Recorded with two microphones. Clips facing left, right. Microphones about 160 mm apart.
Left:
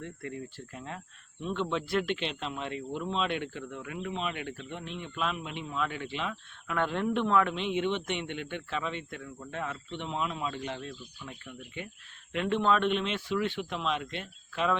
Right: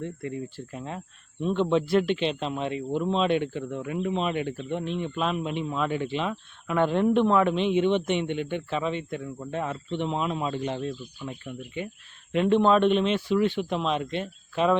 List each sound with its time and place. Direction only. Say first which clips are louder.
0.0 s speech: right 6 dB; 20° right (ahead or behind)